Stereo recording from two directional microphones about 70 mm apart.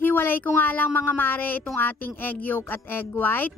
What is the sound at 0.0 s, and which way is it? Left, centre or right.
A woman's voice, left.